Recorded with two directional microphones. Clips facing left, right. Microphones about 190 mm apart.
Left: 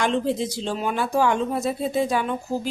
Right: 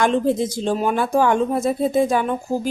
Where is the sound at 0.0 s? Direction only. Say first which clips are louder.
Right 4 dB; 50° right (ahead or behind).